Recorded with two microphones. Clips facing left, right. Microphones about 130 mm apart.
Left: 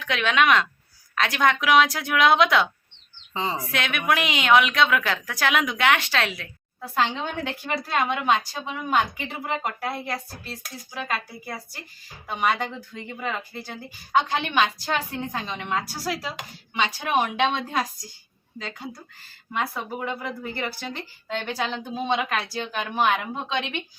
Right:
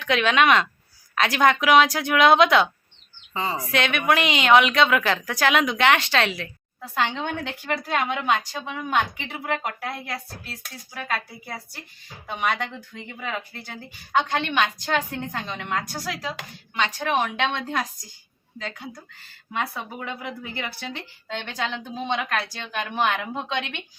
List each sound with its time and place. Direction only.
0.0 s a woman's voice: centre (ahead or behind)
3.3 s speech: 20° left (ahead or behind)
3.6 s a woman's voice: centre (ahead or behind)
20.4 s a woman's voice: centre (ahead or behind)